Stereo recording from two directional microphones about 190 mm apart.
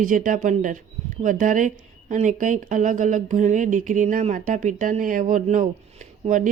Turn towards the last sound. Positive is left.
turn(degrees=-40)  # may be behind; listen again after turning